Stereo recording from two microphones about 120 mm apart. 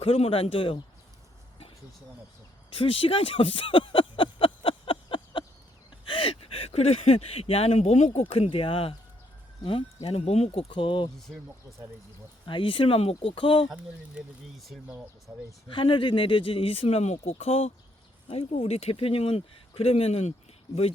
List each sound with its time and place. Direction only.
0.0 s speech: 50° left (ahead or behind)
2.7 s a sound: 50° left (ahead or behind)
6.1 s speech: 50° left (ahead or behind); by 8.2 s 70° left (ahead or behind)
8.3 s speech: 50° left (ahead or behind)
12.5 s speech: 45° left (ahead or behind)
14.2 s speech: centre (ahead or behind)
15.7 s speech: 45° left (ahead or behind)